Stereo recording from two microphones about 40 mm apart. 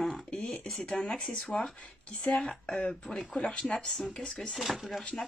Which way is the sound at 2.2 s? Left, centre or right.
Centre.